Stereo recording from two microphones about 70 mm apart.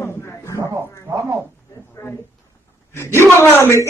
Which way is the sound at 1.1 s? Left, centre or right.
Right.